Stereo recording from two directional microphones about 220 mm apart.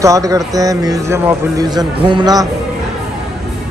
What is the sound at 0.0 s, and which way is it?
Speech, 15° right (ahead or behind).